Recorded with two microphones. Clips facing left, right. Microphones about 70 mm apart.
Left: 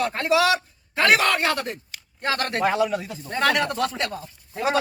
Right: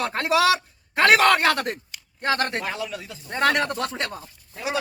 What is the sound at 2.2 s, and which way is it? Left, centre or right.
Speech, right.